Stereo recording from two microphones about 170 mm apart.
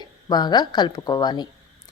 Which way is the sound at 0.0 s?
25° left (ahead or behind).